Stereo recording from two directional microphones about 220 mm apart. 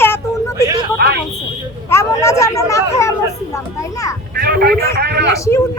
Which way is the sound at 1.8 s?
15° left (ahead or behind).